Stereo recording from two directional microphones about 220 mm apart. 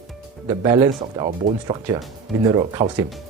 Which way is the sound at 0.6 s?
15° right (ahead or behind).